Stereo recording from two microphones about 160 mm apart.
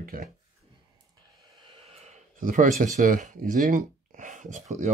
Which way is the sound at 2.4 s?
55° right (ahead or behind).